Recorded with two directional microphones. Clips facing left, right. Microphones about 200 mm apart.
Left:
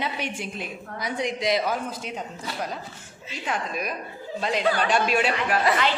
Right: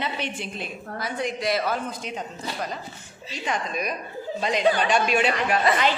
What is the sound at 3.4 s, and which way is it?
Speech, 5° left (ahead or behind).